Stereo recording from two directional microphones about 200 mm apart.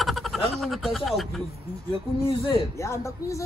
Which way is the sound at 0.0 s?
Centre (ahead or behind).